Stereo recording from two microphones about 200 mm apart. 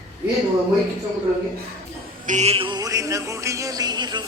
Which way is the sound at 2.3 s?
35° right (ahead or behind).